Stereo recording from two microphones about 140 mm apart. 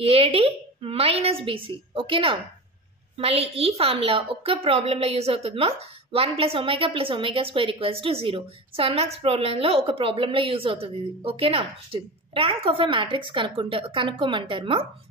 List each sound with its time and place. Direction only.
0.0 s a woman's voice: 40° right (ahead or behind)